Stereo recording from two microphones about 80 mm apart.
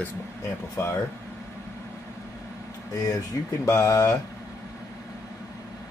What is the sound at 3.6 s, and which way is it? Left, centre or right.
Speech, left.